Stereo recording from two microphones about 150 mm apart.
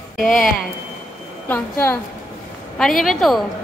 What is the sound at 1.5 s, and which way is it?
Speech, 15° left (ahead or behind).